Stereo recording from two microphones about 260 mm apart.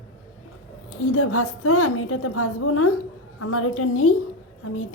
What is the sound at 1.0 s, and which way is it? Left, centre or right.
A woman's voice, left.